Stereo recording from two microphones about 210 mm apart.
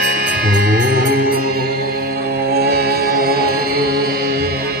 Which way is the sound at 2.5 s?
50° right (ahead or behind).